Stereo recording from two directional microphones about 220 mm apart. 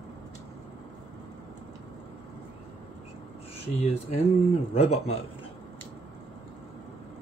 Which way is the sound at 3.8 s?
30° left (ahead or behind).